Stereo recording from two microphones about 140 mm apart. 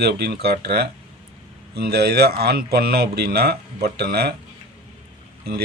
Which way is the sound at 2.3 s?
90° right.